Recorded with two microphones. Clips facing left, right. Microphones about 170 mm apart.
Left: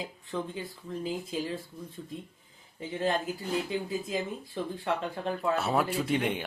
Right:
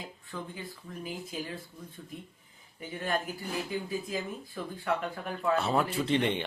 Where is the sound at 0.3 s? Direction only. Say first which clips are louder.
Left 6 dB; 20° left (ahead or behind).